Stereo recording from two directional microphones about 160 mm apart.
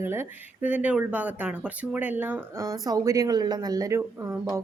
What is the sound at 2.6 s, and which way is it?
Speech, 20° right (ahead or behind).